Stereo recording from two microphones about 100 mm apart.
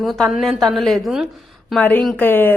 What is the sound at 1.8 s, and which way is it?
Speech, 20° left (ahead or behind).